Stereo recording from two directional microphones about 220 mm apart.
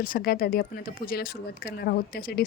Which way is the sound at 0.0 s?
40° left (ahead or behind).